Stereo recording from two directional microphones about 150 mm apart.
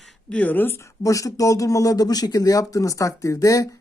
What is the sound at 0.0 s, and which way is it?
Speech, 5° left (ahead or behind).